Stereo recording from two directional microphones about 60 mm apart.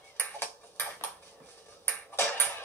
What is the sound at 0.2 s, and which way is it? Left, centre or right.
Ping, left.